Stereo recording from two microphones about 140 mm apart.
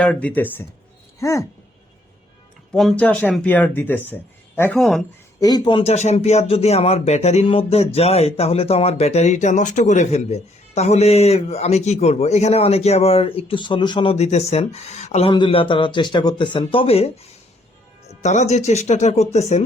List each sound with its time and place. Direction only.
0.0 s speech: 10° left (ahead or behind)
2.7 s speech: 5° left (ahead or behind)
4.8 s speech: centre (ahead or behind)
5.4 s speech: 30° left (ahead or behind)
5.8 s speech: 55° left (ahead or behind)
15.3 s speech: 35° left (ahead or behind)
18.2 s speech: 55° left (ahead or behind)